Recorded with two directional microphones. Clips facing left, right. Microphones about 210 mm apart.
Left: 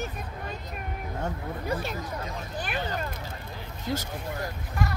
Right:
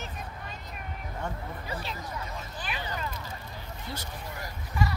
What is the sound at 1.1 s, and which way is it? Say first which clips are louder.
Speech: left 3 dB; 45° left (ahead or behind).